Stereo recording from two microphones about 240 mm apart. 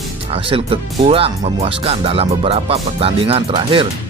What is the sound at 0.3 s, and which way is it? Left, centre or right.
Speech, right.